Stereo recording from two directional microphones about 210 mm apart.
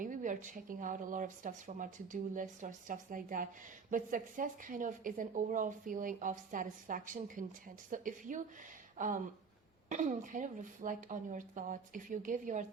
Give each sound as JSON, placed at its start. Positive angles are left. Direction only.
{"t": 0.0, "sound": "speech", "side_deg": -40}